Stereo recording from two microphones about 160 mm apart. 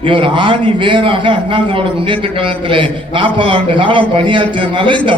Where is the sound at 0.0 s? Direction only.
30° right (ahead or behind).